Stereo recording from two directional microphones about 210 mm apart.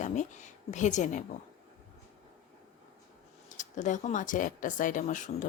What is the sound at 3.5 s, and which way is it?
Speech, 35° left (ahead or behind).